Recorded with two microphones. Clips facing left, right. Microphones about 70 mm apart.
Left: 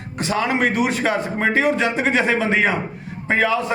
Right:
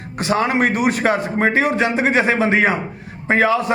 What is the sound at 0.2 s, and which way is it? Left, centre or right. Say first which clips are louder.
A man's voice: right 3 dB; right.